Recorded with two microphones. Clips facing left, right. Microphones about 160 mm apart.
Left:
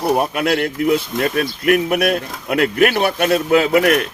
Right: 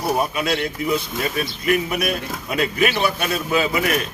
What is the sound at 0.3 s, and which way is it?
Speech, 60° left (ahead or behind).